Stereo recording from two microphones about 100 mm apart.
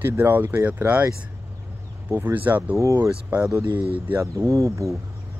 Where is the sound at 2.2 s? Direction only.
15° right (ahead or behind).